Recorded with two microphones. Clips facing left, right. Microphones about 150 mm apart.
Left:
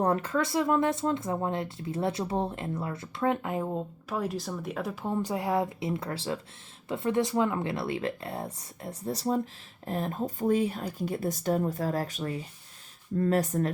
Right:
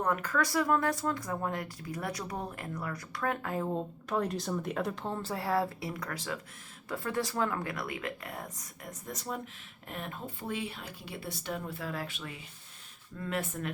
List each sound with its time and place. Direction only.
0.0 s speech: 30° left (ahead or behind)
3.7 s speech: 5° left (ahead or behind)
5.0 s speech: 15° left (ahead or behind); by 13.7 s 40° left (ahead or behind)